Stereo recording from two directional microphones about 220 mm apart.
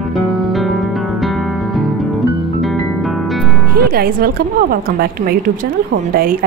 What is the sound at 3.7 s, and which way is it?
A woman's voice, 45° right (ahead or behind).